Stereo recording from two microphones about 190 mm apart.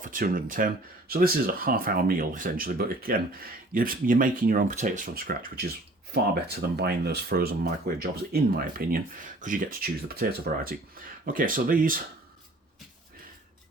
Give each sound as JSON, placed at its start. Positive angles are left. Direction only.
{"t": 0.0, "sound": "speech", "side_deg": -45}